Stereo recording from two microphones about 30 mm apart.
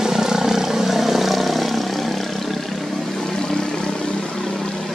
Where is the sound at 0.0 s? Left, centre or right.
Centre.